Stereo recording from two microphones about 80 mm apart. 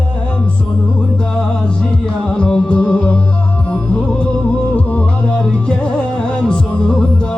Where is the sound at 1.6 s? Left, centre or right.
Centre.